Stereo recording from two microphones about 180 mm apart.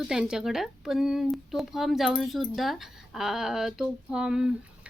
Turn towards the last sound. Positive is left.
turn(degrees=-5)  # may be behind; listen again after turning